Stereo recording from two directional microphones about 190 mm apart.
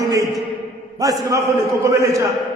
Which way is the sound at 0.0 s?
20° right (ahead or behind).